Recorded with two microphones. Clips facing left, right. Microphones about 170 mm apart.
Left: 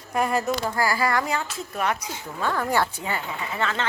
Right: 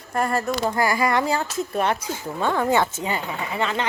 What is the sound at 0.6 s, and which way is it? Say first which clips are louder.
Speech: right 3 dB; 20° right (ahead or behind).